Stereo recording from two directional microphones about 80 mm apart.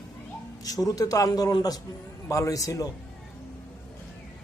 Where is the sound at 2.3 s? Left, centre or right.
Left.